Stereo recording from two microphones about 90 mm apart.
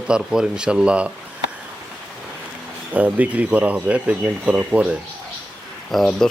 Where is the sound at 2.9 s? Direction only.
15° right (ahead or behind).